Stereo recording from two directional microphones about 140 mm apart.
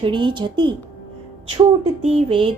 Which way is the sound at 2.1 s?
40° right (ahead or behind).